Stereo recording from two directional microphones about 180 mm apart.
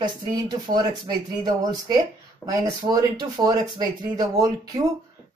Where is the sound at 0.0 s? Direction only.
25° right (ahead or behind).